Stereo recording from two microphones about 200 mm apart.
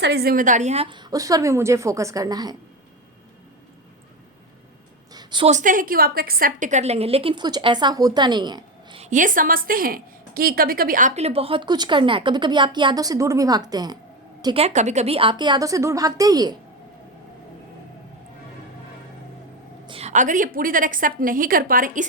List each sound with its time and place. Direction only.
0.0 s a woman's voice: 55° right (ahead or behind); by 2.6 s 20° right (ahead or behind)
5.1 s a sound: 25° right (ahead or behind)
5.5 s a woman's voice: 40° right (ahead or behind); by 9.0 s 25° right (ahead or behind)
9.0 s a woman's voice: 40° right (ahead or behind); by 16.6 s 20° right (ahead or behind)
19.9 s a woman's voice: 30° right (ahead or behind)